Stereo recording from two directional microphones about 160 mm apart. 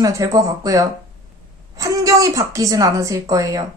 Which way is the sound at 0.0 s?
20° right (ahead or behind).